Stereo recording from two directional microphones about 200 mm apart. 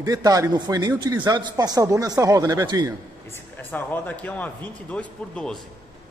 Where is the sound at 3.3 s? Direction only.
10° left (ahead or behind).